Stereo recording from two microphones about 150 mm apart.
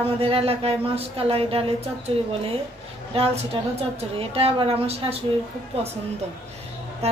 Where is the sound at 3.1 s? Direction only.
40° right (ahead or behind).